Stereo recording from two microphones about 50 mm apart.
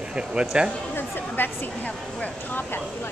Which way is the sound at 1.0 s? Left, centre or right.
Left.